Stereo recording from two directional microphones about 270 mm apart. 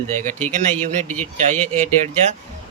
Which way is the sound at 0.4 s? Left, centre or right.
Right.